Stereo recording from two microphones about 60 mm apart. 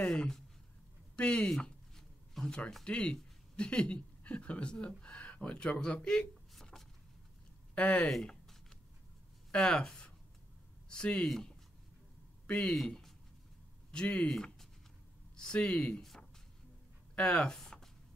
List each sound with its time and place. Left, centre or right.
0.0 s speech: centre
1.5 s a sound: centre
2.8 s speech: centre
6.5 s a sound: centre
7.7 s speech: centre
8.1 s a sound: centre
9.5 s speech: centre
12.4 s speech: left
13.9 s speech: left
14.2 s speech: centre
15.3 s speech: centre
17.1 s speech: left